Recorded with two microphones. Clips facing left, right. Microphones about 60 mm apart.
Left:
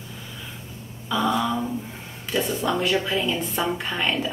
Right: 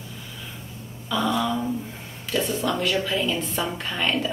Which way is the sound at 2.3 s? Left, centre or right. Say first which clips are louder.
Left 1 dB; centre.